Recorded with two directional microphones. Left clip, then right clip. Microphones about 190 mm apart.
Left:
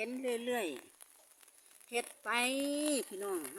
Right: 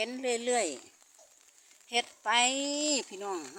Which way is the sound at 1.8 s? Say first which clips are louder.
Right 7 dB; 10° right (ahead or behind).